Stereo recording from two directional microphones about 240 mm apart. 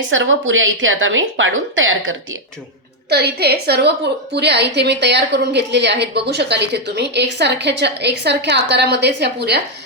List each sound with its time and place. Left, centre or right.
0.1 s a woman's voice: right
3.1 s a woman's voice: right